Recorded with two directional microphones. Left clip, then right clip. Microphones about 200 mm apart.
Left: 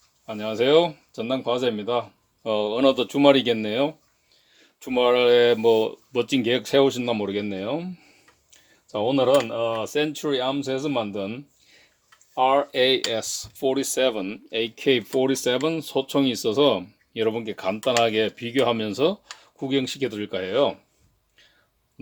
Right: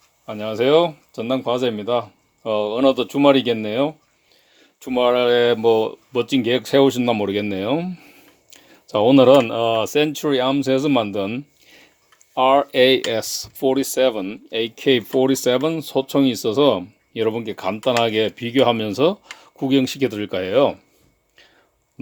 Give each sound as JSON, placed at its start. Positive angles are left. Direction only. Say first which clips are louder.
{"t": 0.3, "sound": "speech", "louder": "right 3 dB", "side_deg": -20}